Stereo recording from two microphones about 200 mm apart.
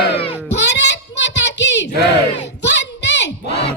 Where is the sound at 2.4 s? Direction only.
60° left (ahead or behind).